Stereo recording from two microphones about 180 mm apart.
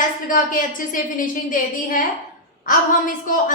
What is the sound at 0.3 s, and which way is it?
A woman's voice, 50° left (ahead or behind).